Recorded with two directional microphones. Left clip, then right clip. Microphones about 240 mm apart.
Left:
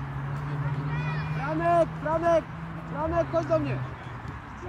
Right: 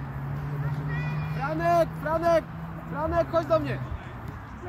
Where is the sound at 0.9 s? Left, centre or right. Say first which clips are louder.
Left 1 dB; right.